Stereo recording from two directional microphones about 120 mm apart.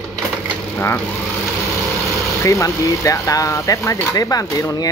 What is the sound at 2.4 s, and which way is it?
Speech, 25° left (ahead or behind).